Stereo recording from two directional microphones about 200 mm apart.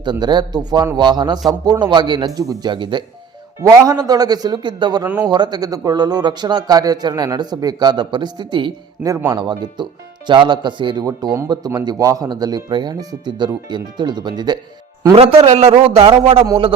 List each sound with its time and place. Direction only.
0.0 s speech: 20° right (ahead or behind)
5.0 s a man's voice: 10° right (ahead or behind)
5.3 s speech: 20° right (ahead or behind)